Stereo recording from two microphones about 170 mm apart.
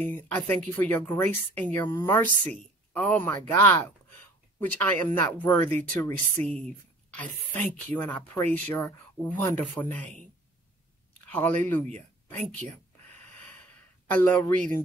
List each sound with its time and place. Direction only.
0.1 s speech: 10° left (ahead or behind)
11.2 s speech: 10° left (ahead or behind)
14.0 s a woman's voice: 10° left (ahead or behind)